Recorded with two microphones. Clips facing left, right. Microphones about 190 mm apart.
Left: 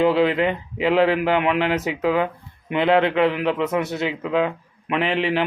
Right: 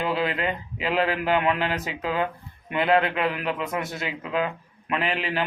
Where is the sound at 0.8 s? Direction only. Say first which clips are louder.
Left 7 dB; 20° left (ahead or behind).